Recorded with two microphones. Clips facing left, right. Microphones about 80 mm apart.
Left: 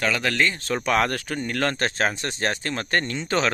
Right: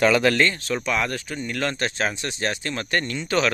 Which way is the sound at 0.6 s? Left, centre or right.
Left.